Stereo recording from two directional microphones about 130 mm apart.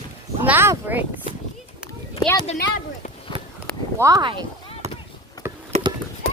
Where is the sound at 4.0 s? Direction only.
25° right (ahead or behind).